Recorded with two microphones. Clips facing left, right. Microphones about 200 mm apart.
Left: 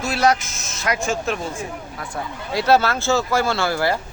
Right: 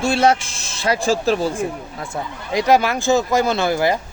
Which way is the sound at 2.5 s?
15° right (ahead or behind).